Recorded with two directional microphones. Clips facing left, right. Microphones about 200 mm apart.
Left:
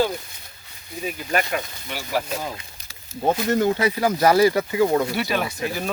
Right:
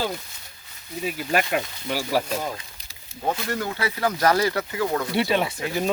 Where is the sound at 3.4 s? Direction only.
20° left (ahead or behind).